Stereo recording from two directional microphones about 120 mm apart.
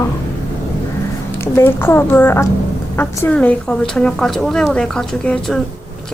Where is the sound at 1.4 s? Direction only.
20° left (ahead or behind).